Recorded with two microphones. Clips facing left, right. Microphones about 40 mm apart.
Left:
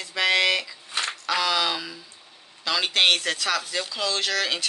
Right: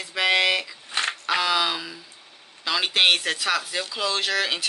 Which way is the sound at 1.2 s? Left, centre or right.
Centre.